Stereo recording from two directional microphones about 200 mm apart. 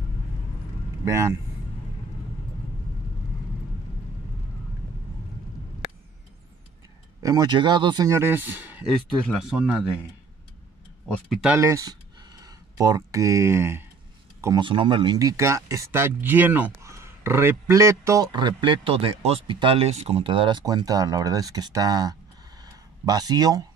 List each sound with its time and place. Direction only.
1.0 s speech: 15° right (ahead or behind)
7.2 s speech: 20° right (ahead or behind)
11.1 s speech: centre (ahead or behind)
11.5 s speech: 15° right (ahead or behind)